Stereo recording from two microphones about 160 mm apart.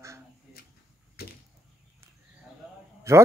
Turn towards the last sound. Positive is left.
turn(degrees=-15)  # may be behind; listen again after turning